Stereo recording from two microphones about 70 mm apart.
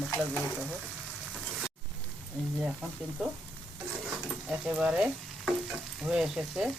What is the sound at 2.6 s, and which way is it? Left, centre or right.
Speech, centre.